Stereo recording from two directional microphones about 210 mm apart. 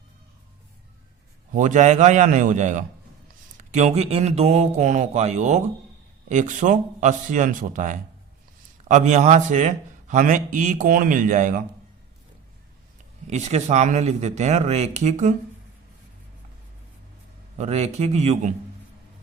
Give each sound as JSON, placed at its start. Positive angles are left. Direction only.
{"t": 1.5, "sound": "a man's voice", "side_deg": -35}
{"t": 13.2, "sound": "a man's voice", "side_deg": -30}
{"t": 17.6, "sound": "a man's voice", "side_deg": -30}